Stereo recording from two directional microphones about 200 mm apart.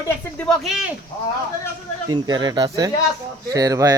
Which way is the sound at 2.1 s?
20° right (ahead or behind).